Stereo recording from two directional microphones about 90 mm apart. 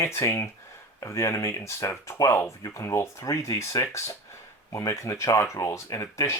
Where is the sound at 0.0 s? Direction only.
30° left (ahead or behind).